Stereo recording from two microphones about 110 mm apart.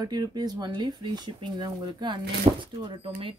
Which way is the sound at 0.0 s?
35° right (ahead or behind).